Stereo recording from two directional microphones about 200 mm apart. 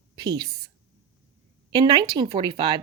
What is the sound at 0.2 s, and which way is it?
Speech, 20° right (ahead or behind).